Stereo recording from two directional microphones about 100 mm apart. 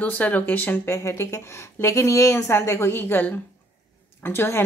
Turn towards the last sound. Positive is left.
turn(degrees=20)  # may be behind; listen again after turning